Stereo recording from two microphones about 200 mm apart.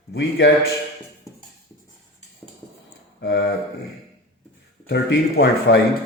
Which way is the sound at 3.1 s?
55° left (ahead or behind).